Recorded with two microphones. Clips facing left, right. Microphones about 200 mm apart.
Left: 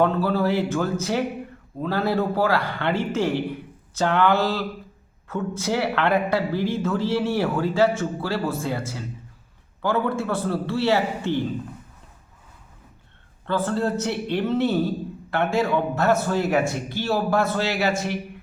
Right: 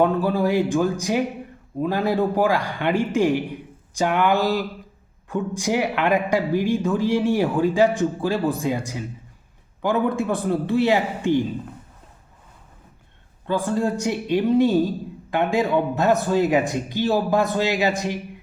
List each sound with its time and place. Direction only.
0.0 s speech: 15° right (ahead or behind)
13.5 s speech: 15° right (ahead or behind)